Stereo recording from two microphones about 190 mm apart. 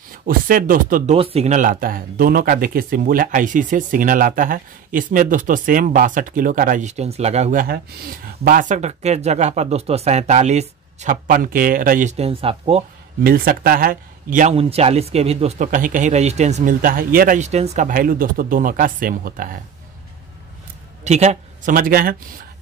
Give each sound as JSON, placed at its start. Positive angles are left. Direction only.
{"t": 0.1, "sound": "speech", "side_deg": -45}
{"t": 1.1, "sound": "speech", "side_deg": -30}
{"t": 7.6, "sound": "speech", "side_deg": -50}
{"t": 13.2, "sound": "speech", "side_deg": -50}
{"t": 14.5, "sound": "speech", "side_deg": -30}
{"t": 21.0, "sound": "speech", "side_deg": -35}